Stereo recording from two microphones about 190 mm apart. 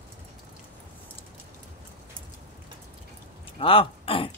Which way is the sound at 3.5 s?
30° left (ahead or behind).